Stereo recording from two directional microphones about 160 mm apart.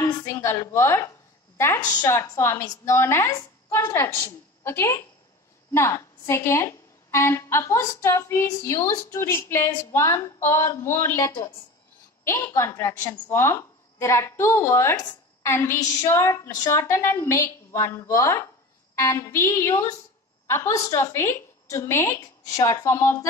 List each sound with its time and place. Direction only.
0.0 s a woman's voice: 20° left (ahead or behind)
2.0 s speech: 15° left (ahead or behind)
3.3 s a sound: 25° left (ahead or behind)
3.8 s speech: 15° left (ahead or behind)